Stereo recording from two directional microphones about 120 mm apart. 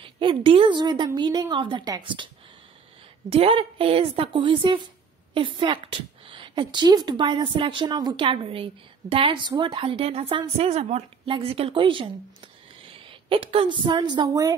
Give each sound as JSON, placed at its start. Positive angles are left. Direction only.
{"t": 0.0, "sound": "a woman's voice", "side_deg": -40}
{"t": 3.3, "sound": "a woman's voice", "side_deg": -50}
{"t": 11.2, "sound": "a woman's voice", "side_deg": -45}